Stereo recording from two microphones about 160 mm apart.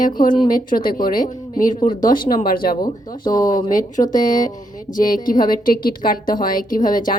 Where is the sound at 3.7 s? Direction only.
55° left (ahead or behind).